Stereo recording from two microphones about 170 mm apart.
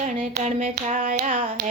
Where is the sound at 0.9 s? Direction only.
50° right (ahead or behind).